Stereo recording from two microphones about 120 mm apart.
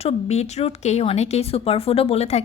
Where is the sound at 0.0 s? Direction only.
60° left (ahead or behind).